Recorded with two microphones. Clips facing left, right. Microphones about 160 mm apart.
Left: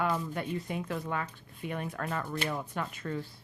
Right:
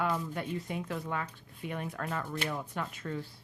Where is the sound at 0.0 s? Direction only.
55° left (ahead or behind).